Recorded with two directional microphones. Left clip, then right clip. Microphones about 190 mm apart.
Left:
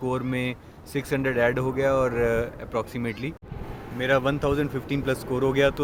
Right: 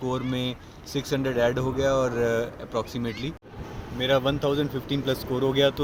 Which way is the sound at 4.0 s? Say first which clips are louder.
Even; centre (ahead or behind).